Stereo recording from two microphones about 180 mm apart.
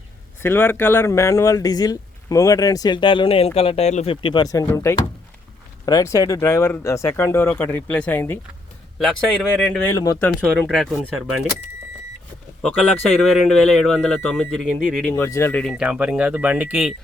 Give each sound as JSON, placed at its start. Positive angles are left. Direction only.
{"t": 0.4, "sound": "speech", "side_deg": 10}
{"t": 9.9, "sound": "speech", "side_deg": 20}
{"t": 10.2, "sound": "speech", "side_deg": 5}
{"t": 13.3, "sound": "speech", "side_deg": 5}
{"t": 15.1, "sound": "speech", "side_deg": 15}
{"t": 15.8, "sound": "speech", "side_deg": -5}